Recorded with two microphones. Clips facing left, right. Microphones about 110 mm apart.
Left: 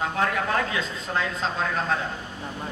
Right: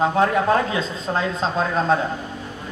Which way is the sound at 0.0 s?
30° right (ahead or behind).